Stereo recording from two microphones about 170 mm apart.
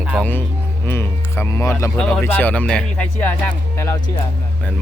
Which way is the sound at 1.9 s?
5° left (ahead or behind).